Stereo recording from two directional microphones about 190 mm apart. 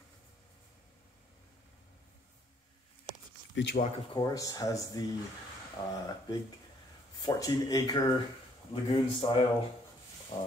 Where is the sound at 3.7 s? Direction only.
20° left (ahead or behind).